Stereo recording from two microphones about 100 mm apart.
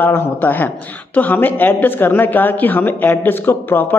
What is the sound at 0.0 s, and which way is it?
Speech, 20° left (ahead or behind).